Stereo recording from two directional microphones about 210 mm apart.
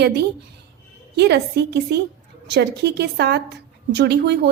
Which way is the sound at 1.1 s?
50° right (ahead or behind).